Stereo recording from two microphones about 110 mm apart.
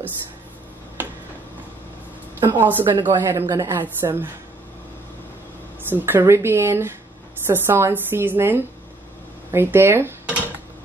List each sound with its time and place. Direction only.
2.5 s a woman's voice: 20° right (ahead or behind)
5.9 s a woman's voice: 20° right (ahead or behind)